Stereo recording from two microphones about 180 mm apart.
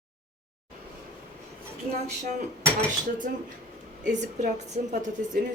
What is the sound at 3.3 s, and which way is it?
A woman's voice, 55° right (ahead or behind).